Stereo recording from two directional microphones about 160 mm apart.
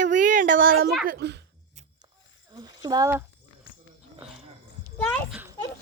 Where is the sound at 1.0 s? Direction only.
90° right.